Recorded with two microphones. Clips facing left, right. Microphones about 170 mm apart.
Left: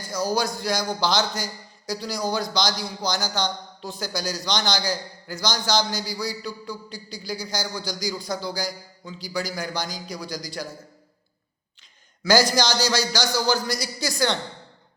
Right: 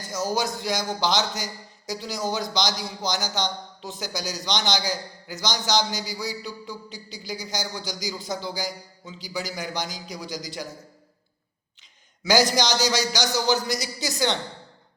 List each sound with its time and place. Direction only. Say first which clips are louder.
0.3 s a man's voice: left 1 dB; 20° right (ahead or behind)
12.2 s a man's voice: left 1 dB; 20° right (ahead or behind)